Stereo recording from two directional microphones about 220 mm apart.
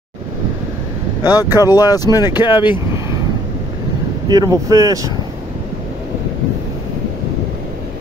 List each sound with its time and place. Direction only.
1.2 s speech: 15° left (ahead or behind)
4.3 s speech: 15° right (ahead or behind)